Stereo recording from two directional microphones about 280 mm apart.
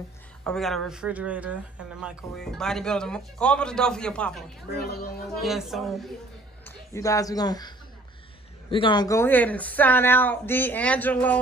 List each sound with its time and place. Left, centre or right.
0.4 s speech: centre
4.7 s speech: left
5.4 s speech: centre
6.6 s speech: centre